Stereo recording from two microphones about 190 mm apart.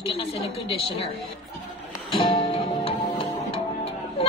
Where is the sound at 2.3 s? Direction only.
25° left (ahead or behind).